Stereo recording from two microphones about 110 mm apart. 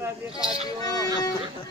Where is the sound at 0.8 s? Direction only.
35° left (ahead or behind).